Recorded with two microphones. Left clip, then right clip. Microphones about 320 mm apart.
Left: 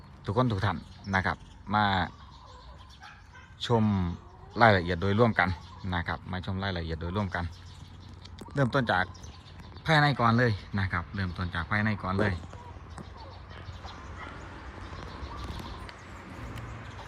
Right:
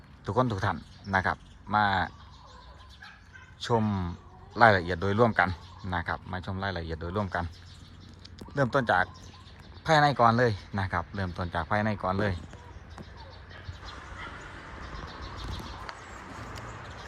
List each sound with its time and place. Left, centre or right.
0.3 s speech: centre
3.6 s speech: centre